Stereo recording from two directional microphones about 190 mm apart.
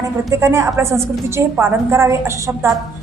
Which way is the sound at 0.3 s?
15° right (ahead or behind).